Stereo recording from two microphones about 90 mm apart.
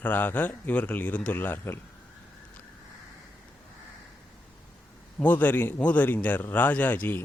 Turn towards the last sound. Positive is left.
turn(degrees=20)  # may be behind; listen again after turning